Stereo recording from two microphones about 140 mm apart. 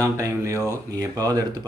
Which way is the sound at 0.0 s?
20° right (ahead or behind).